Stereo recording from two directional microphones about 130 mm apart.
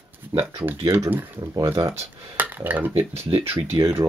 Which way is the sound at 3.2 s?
50° right (ahead or behind).